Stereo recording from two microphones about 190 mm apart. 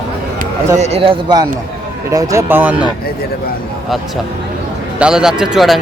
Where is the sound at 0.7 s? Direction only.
35° right (ahead or behind); by 2.9 s 10° right (ahead or behind).